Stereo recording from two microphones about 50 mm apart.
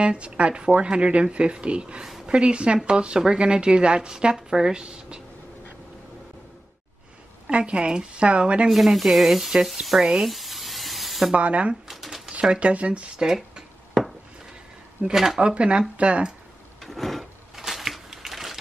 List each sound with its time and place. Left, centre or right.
0.0 s a woman's voice: right
7.4 s a woman's voice: right
8.6 s speech: centre
10.2 s a sound: centre
11.3 s a woman's voice: right
11.9 s shuffling cards: centre
12.3 s speech: right
15.0 s speech: centre
15.4 s a woman's voice: right
16.8 s a sound: centre